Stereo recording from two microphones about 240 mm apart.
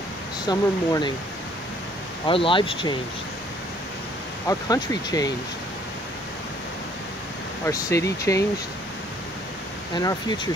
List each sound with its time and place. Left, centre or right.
0.5 s speech: centre
2.2 s speech: left
4.5 s speech: centre
7.6 s speech: centre
9.9 s speech: centre